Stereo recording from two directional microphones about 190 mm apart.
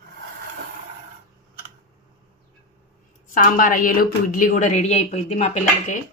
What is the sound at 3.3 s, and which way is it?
A woman's voice, 45° left (ahead or behind).